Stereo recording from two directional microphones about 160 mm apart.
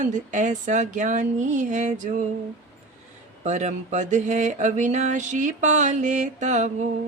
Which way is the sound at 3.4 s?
50° right (ahead or behind).